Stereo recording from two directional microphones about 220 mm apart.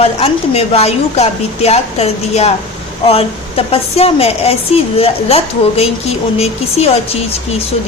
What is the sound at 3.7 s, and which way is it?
A woman's voice, 25° left (ahead or behind).